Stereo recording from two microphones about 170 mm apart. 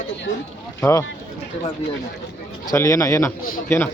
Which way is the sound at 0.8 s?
20° left (ahead or behind).